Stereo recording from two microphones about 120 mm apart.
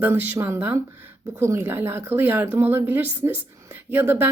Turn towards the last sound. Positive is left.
turn(degrees=-20)  # may be behind; listen again after turning